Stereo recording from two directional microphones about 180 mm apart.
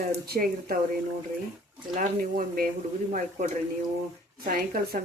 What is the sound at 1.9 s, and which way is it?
Speech, 45° right (ahead or behind).